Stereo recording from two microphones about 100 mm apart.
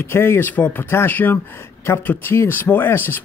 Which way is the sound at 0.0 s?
25° left (ahead or behind).